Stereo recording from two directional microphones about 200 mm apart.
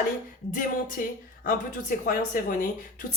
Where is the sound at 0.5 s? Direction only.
45° left (ahead or behind).